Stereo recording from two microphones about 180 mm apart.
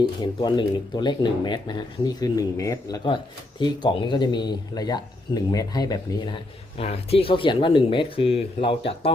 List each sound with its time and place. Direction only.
0.0 s speech: 25° left (ahead or behind)